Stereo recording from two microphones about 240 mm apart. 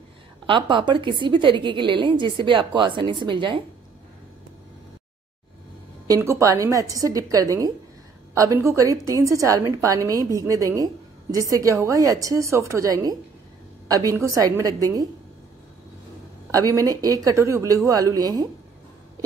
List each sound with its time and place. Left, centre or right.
0.5 s a woman's voice: centre
6.0 s a woman's voice: centre
16.5 s a woman's voice: centre